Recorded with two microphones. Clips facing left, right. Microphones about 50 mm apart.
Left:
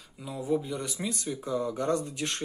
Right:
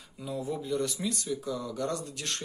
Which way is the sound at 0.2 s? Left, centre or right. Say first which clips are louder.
Left 4 dB; centre.